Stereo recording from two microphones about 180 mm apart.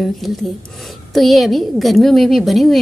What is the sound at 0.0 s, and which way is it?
A woman's voice, centre (ahead or behind).